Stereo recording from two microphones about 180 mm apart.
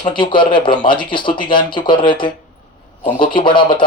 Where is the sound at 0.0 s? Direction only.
25° left (ahead or behind).